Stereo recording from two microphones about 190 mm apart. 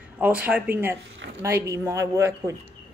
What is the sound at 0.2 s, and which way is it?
A woman's voice, 5° right (ahead or behind).